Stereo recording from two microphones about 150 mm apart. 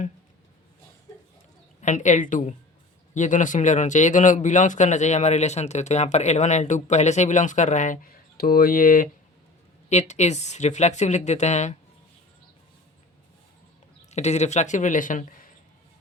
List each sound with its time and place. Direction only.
1.8 s a woman's voice: 55° left (ahead or behind)
8.4 s speech: 80° left
9.9 s a man's voice: 50° left (ahead or behind)
14.1 s a man's voice: 50° left (ahead or behind)